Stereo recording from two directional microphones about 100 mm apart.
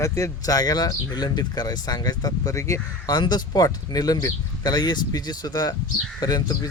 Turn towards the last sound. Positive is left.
turn(degrees=40)  # may be behind; listen again after turning